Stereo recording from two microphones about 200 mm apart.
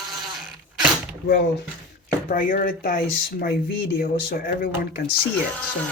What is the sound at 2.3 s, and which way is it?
Speech, 45° left (ahead or behind).